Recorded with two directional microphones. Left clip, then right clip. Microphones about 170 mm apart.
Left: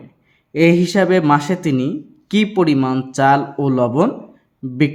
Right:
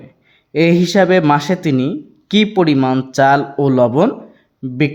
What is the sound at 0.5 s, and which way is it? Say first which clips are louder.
Speech: right 1 dB; 25° right (ahead or behind).